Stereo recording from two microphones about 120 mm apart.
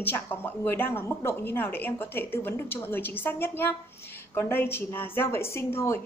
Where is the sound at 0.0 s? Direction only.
15° left (ahead or behind).